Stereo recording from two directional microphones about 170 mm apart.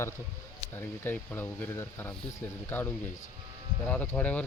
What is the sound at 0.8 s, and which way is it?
Speech, 10° left (ahead or behind).